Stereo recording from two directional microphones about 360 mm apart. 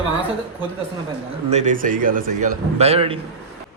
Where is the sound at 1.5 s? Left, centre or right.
Centre.